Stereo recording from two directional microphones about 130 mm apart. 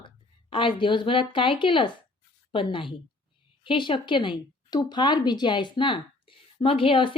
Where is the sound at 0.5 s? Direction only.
40° left (ahead or behind).